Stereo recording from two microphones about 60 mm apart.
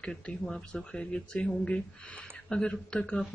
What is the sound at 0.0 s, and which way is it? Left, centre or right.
Speech, centre.